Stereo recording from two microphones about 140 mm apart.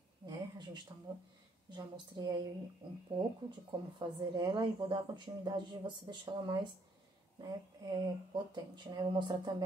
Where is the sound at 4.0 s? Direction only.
30° right (ahead or behind).